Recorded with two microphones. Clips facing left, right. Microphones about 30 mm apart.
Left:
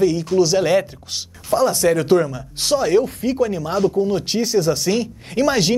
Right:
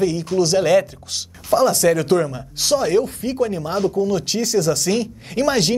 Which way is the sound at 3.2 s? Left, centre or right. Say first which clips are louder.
Left 3 dB; left.